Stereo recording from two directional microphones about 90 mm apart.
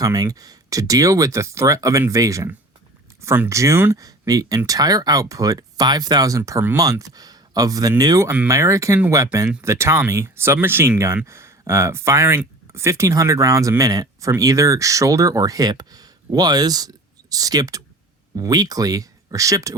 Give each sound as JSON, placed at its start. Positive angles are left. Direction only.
{"t": 0.0, "sound": "speech", "side_deg": -40}
{"t": 3.2, "sound": "a sound", "side_deg": -30}
{"t": 3.5, "sound": "speech", "side_deg": -35}
{"t": 3.9, "sound": "speech", "side_deg": -40}